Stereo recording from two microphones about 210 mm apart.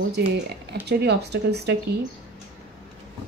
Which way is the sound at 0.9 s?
50° right (ahead or behind).